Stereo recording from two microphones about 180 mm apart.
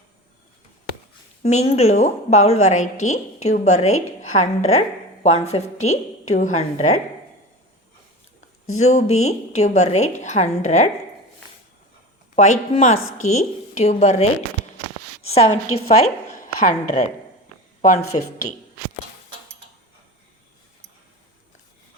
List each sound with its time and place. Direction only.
1.4 s a woman's voice: 35° left (ahead or behind)
8.7 s a woman's voice: 40° left (ahead or behind)
12.4 s a woman's voice: 40° left (ahead or behind)
18.1 s a woman's voice: 35° left (ahead or behind)